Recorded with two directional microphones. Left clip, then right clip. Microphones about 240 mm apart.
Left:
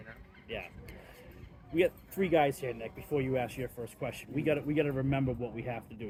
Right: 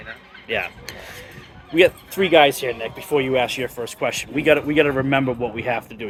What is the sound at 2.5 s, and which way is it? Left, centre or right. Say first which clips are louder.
Speech: right 13 dB; right.